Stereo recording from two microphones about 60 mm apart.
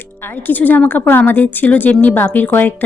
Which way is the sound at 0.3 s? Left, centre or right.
Left.